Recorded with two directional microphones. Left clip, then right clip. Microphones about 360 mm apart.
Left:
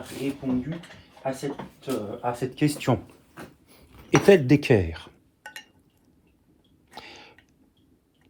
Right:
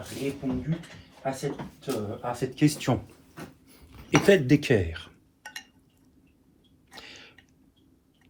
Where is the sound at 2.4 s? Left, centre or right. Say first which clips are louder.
Even; left.